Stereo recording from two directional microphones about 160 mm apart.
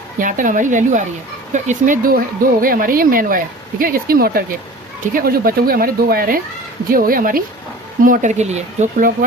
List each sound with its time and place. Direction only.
0.2 s a woman's voice: 55° right (ahead or behind)